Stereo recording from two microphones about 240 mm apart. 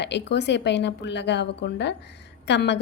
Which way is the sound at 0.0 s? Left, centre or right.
Left.